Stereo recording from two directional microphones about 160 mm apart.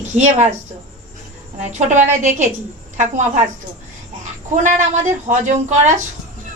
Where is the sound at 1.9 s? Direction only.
50° right (ahead or behind).